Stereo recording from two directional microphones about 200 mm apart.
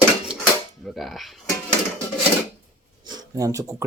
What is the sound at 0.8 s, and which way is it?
Speech, centre (ahead or behind).